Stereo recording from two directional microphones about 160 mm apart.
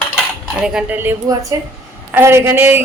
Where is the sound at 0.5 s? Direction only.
5° right (ahead or behind).